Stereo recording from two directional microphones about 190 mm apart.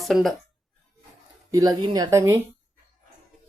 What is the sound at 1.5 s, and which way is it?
Speech, 20° right (ahead or behind).